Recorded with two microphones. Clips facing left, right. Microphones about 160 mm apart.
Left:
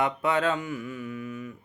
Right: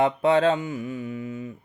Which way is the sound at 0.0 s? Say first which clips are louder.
Right 6 dB; 30° right (ahead or behind).